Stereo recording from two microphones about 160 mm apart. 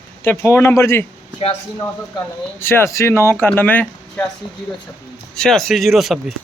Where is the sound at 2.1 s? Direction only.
15° left (ahead or behind).